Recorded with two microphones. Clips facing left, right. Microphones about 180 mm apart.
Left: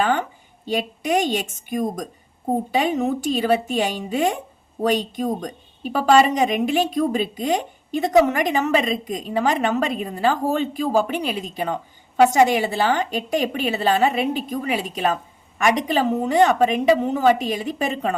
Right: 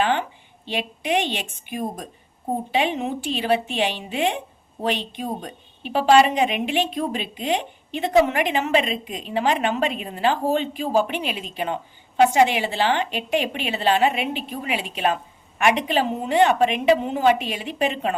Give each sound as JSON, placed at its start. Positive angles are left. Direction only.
{"t": 0.0, "sound": "a woman's voice", "side_deg": 40}